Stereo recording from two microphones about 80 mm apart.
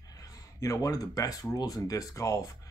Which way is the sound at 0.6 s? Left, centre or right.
Left.